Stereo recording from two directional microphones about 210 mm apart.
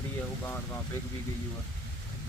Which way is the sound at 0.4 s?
10° left (ahead or behind).